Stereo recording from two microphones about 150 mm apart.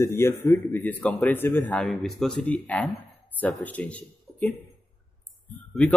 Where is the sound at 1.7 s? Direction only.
Centre (ahead or behind).